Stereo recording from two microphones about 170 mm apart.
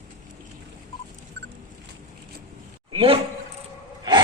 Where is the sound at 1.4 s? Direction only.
90° right.